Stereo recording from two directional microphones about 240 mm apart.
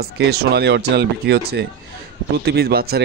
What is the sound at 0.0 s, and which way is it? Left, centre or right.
A man's voice, right.